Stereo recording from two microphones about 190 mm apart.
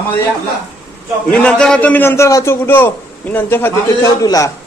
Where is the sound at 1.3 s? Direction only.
5° left (ahead or behind).